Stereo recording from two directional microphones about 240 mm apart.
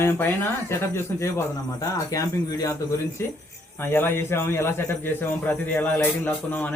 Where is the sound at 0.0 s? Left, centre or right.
Centre.